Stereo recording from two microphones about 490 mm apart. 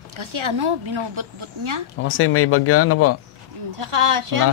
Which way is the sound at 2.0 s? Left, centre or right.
Left.